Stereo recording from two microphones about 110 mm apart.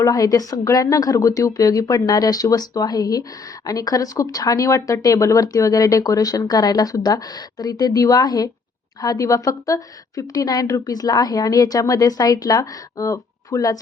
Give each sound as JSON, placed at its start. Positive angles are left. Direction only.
{"t": 0.0, "sound": "a woman's voice", "side_deg": 30}